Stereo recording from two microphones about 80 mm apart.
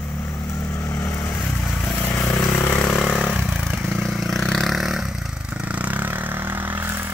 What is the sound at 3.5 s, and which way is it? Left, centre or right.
Vehicle, centre.